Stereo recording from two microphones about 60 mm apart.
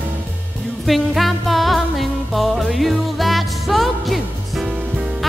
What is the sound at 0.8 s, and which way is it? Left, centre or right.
Music, centre.